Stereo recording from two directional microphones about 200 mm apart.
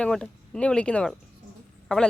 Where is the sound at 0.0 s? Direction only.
5° left (ahead or behind).